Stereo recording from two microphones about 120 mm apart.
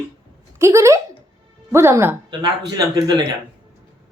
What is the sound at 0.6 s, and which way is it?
A woman's voice, 25° right (ahead or behind).